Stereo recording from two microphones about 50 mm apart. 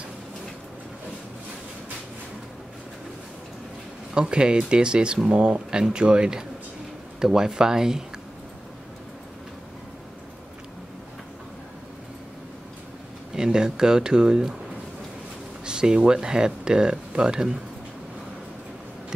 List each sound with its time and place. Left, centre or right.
4.1 s speech: centre
13.4 s speech: centre
15.6 s speech: centre